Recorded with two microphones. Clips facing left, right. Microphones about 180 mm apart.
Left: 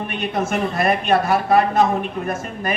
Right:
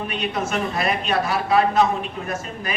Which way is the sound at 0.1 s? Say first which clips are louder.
Left 4 dB; 55° left (ahead or behind).